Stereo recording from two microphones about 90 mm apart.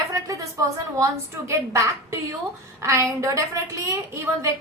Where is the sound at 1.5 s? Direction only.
35° right (ahead or behind).